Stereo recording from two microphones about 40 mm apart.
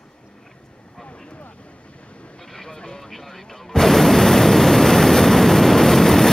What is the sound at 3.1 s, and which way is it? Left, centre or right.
Artillery fire, centre.